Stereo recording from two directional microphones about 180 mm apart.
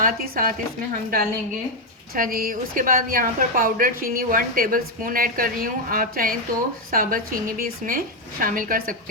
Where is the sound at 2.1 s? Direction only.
50° right (ahead or behind).